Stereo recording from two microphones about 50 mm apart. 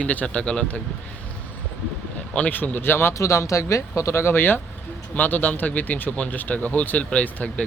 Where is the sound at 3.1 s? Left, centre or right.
Left.